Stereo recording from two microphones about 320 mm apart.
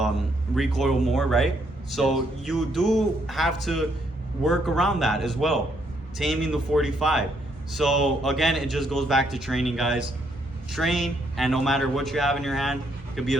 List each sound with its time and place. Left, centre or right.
0.5 s a man's voice: centre